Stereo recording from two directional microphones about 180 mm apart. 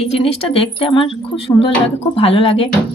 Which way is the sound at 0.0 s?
35° left (ahead or behind).